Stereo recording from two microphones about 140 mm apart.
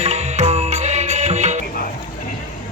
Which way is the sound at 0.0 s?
50° right (ahead or behind).